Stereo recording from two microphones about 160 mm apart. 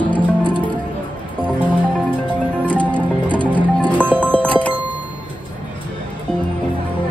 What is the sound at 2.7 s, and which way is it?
Music, 10° left (ahead or behind).